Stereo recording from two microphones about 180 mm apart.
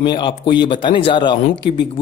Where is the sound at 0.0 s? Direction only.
25° left (ahead or behind).